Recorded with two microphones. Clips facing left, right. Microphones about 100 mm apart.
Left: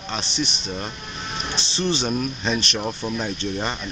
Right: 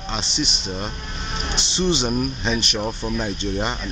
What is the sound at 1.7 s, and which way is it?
Speech, 15° right (ahead or behind).